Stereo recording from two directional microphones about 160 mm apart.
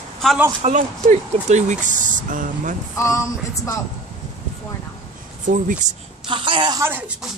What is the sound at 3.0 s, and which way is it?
Speech, 20° left (ahead or behind).